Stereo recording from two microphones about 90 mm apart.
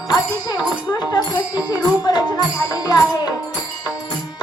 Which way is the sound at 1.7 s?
50° left (ahead or behind).